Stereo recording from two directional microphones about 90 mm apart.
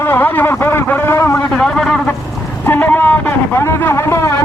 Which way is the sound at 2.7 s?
20° left (ahead or behind).